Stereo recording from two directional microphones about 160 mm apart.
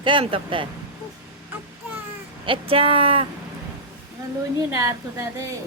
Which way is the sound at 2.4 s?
35° right (ahead or behind).